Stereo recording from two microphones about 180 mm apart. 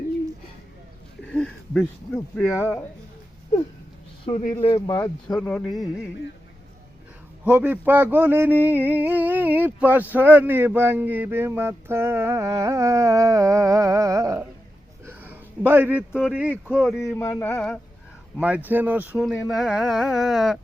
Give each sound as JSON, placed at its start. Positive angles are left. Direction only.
{"t": 1.3, "sound": "speech", "side_deg": 5}
{"t": 4.3, "sound": "a man's voice", "side_deg": 40}
{"t": 4.6, "sound": "speech", "side_deg": 25}
{"t": 5.3, "sound": "speech", "side_deg": 5}
{"t": 7.4, "sound": "a sound", "side_deg": -10}
{"t": 15.0, "sound": "speech", "side_deg": -10}
{"t": 17.2, "sound": "a sound", "side_deg": 10}
{"t": 18.3, "sound": "speech", "side_deg": -10}